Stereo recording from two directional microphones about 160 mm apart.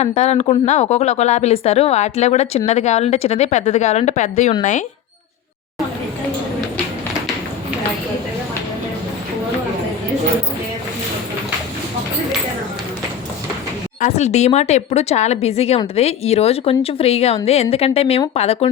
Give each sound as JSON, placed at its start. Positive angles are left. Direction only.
{"t": 0.0, "sound": "a woman's voice", "side_deg": 45}
{"t": 14.0, "sound": "a woman's voice", "side_deg": 45}